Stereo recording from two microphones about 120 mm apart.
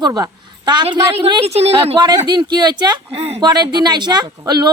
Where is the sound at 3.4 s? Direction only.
35° right (ahead or behind).